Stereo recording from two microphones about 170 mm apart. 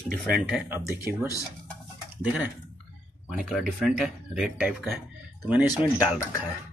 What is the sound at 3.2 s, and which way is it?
Speech, 5° right (ahead or behind).